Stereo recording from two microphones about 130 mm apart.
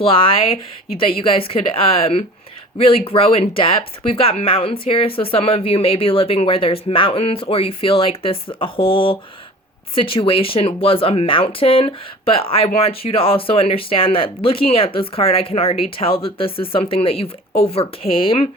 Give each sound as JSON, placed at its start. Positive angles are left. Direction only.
{"t": 0.0, "sound": "speech", "side_deg": 45}